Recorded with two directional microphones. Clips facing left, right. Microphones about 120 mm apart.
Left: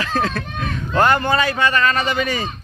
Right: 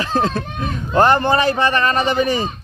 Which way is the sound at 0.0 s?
25° right (ahead or behind).